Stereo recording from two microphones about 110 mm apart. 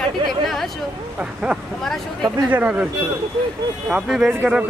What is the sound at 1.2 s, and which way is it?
Speech, 10° right (ahead or behind).